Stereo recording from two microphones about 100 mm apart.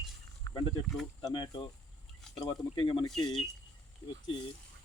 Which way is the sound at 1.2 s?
50° left (ahead or behind).